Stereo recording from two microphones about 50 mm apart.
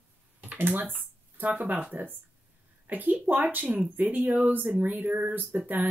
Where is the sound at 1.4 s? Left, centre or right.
Right.